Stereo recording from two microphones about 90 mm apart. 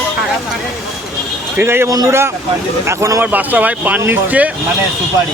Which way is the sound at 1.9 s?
40° right (ahead or behind).